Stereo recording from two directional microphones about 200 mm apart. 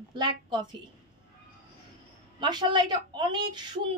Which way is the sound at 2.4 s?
20° right (ahead or behind).